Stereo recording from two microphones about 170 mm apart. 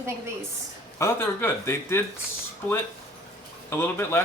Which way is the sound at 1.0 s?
15° left (ahead or behind).